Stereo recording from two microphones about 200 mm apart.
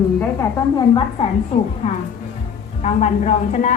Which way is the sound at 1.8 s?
35° left (ahead or behind).